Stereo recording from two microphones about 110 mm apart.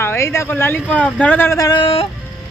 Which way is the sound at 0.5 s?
15° left (ahead or behind).